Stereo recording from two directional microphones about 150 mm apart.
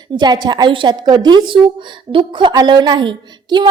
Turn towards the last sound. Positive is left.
turn(degrees=-30)  # may be behind; listen again after turning